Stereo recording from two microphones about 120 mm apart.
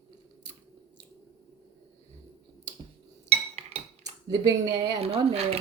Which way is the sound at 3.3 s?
60° right (ahead or behind).